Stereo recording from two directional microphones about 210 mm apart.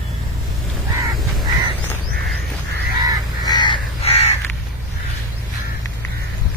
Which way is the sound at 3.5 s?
20° left (ahead or behind).